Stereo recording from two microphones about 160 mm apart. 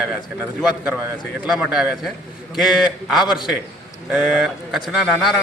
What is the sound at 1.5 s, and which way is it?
A man's voice, 5° right (ahead or behind).